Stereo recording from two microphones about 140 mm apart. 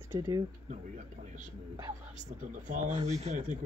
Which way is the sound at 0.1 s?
35° right (ahead or behind).